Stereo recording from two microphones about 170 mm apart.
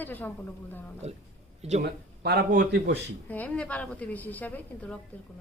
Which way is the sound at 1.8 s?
70° right (ahead or behind).